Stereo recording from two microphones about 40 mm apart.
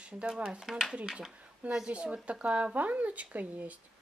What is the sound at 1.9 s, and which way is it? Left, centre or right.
Speech, right.